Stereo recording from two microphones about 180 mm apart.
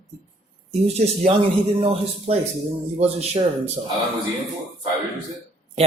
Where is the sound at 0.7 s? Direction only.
35° right (ahead or behind).